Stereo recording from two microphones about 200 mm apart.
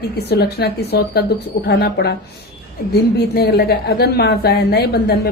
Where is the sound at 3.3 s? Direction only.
50° left (ahead or behind).